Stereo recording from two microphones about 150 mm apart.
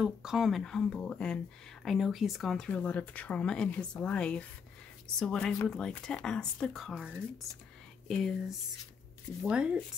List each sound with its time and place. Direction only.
0.0 s speech: 5° right (ahead or behind)
9.4 s speech: 5° right (ahead or behind)